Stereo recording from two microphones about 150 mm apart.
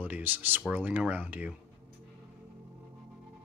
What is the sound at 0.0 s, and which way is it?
Speech, 10° right (ahead or behind).